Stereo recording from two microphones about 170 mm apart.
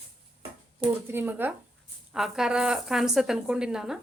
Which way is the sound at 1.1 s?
10° right (ahead or behind).